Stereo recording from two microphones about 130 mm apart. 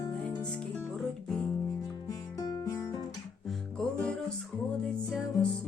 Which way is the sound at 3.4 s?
5° left (ahead or behind).